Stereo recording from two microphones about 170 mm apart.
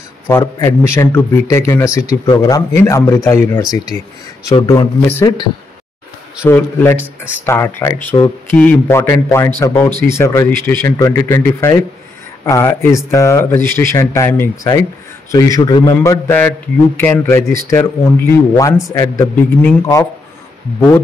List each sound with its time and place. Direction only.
0.3 s a man's voice: 15° left (ahead or behind)
6.4 s a man's voice: 10° left (ahead or behind); by 15.9 s 25° left (ahead or behind)
16.0 s a man's voice: 15° left (ahead or behind)